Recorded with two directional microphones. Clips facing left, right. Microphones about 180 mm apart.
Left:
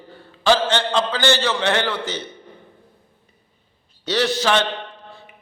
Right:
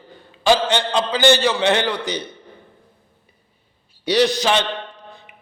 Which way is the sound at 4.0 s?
15° right (ahead or behind).